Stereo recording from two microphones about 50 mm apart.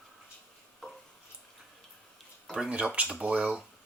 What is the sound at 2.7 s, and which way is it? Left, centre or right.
Speech, right.